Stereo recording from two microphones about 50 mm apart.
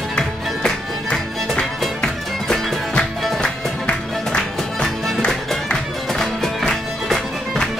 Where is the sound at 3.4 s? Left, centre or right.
Left; by 7.6 s centre.